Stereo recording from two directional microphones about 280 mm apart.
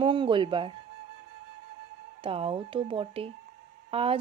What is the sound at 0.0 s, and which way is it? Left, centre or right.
Speech, centre.